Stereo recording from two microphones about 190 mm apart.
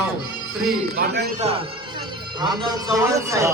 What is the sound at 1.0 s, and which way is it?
Speech, 55° right (ahead or behind).